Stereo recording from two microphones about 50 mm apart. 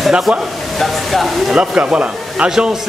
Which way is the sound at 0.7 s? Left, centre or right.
Centre.